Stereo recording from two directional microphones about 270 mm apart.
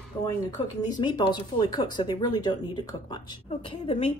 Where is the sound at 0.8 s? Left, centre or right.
Centre.